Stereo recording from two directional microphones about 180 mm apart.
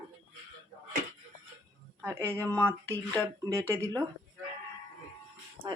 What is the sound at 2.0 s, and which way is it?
Speech, 15° right (ahead or behind).